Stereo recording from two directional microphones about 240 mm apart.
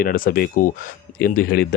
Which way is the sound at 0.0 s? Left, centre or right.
Left.